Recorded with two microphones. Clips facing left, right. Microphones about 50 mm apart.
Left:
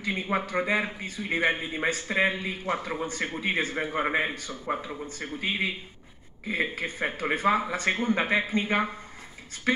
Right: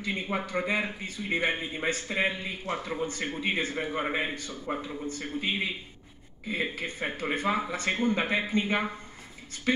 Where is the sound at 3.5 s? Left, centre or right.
Left.